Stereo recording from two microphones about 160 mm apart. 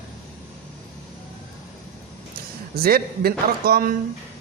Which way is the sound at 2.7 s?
70° right (ahead or behind).